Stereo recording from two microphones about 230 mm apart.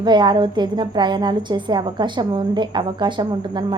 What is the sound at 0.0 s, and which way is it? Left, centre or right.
A woman's voice, centre.